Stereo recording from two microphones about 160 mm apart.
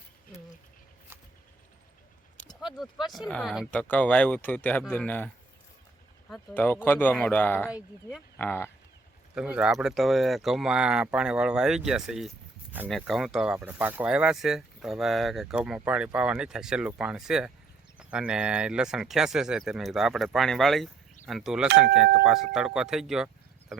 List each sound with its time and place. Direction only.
2.6 s speech: centre (ahead or behind)
3.7 s speech: 10° left (ahead or behind)
6.3 s speech: 10° left (ahead or behind)
9.3 s speech: 5° right (ahead or behind)